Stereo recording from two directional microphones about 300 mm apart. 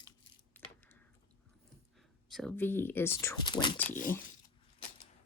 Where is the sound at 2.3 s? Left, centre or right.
Centre.